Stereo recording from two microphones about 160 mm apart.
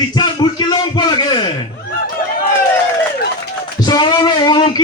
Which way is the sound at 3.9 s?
25° left (ahead or behind).